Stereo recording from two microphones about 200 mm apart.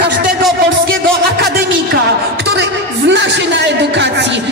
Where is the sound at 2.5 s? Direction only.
60° right (ahead or behind).